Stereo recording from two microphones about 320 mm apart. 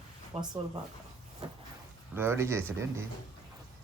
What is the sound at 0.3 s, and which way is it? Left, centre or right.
Speech, centre.